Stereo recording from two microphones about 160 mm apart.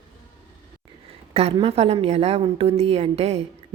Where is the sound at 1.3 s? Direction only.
40° right (ahead or behind).